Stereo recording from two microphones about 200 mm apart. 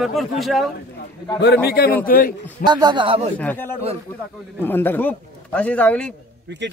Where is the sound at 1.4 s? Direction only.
55° left (ahead or behind).